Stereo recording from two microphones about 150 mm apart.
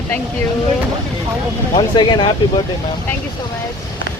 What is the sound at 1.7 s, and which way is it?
Speech, 30° left (ahead or behind).